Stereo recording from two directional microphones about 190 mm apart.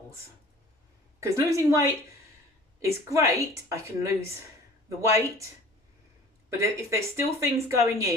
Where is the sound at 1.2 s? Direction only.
15° right (ahead or behind).